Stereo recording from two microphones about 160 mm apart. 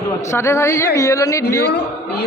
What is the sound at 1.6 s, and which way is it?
Speech, 90° left.